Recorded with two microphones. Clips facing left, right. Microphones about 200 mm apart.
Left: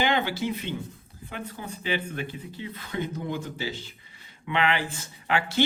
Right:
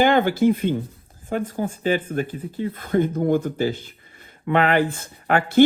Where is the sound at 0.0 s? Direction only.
50° right (ahead or behind).